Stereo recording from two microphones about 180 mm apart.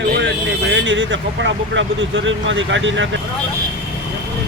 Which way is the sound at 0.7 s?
90° right.